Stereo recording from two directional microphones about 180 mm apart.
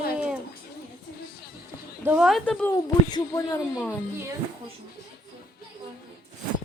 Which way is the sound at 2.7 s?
20° left (ahead or behind).